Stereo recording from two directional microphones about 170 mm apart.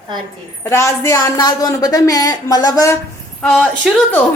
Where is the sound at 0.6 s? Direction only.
15° left (ahead or behind).